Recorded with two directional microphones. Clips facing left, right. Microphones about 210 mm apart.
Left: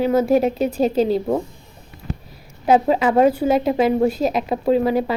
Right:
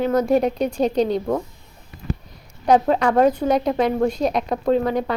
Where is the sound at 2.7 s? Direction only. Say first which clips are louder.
Left 1 dB; 5° left (ahead or behind).